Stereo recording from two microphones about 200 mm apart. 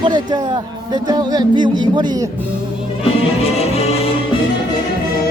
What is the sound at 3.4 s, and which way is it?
Music, 30° left (ahead or behind).